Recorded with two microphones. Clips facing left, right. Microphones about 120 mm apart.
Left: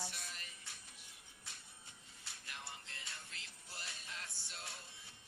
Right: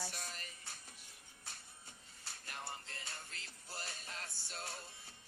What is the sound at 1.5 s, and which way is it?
Music, 40° right (ahead or behind).